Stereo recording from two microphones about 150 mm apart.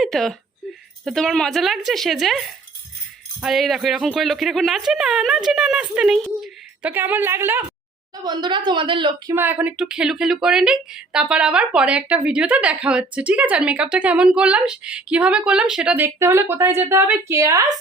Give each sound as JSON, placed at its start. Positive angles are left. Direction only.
{"t": 0.0, "sound": "speech", "side_deg": 0}
{"t": 8.1, "sound": "a woman's voice", "side_deg": -30}
{"t": 9.3, "sound": "speech", "side_deg": -15}
{"t": 16.0, "sound": "a woman's voice", "side_deg": -20}